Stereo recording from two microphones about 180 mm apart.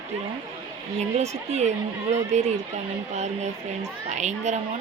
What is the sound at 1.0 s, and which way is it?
Speech, 40° right (ahead or behind).